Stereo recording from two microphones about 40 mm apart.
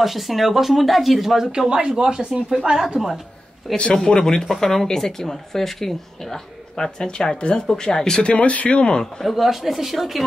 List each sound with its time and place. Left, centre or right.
0.0 s speech: centre
1.7 s speech: right
3.7 s speech: left
4.0 s speech: centre
8.2 s speech: left
9.0 s speech: centre